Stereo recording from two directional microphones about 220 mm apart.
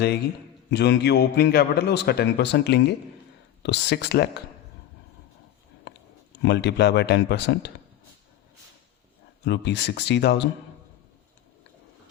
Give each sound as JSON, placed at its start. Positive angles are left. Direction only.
{"t": 0.7, "sound": "a man's voice", "side_deg": 50}
{"t": 6.4, "sound": "a man's voice", "side_deg": 50}
{"t": 9.4, "sound": "a man's voice", "side_deg": 50}